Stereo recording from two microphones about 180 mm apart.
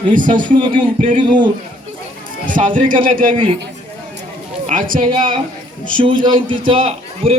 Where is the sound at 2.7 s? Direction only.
50° right (ahead or behind).